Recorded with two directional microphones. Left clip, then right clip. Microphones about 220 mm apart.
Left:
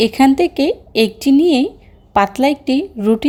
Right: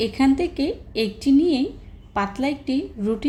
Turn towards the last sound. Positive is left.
turn(degrees=35)  # may be behind; listen again after turning